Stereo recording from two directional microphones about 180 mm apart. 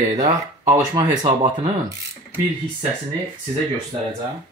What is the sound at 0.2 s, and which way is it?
Speech, 20° right (ahead or behind).